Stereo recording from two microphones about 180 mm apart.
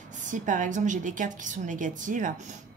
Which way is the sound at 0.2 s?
45° right (ahead or behind).